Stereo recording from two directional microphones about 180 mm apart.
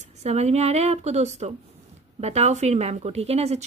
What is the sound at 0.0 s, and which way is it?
A woman's voice, 40° right (ahead or behind).